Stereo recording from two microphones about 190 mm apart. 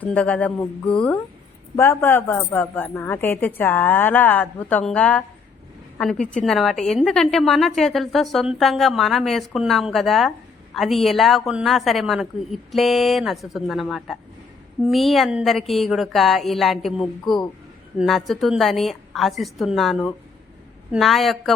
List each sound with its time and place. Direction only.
0.0 s a woman's voice: 5° left (ahead or behind)